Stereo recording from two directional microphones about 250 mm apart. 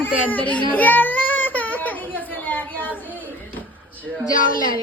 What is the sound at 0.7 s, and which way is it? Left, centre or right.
Baby cry, centre.